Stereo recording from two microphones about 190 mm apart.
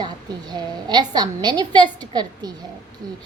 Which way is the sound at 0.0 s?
20° right (ahead or behind).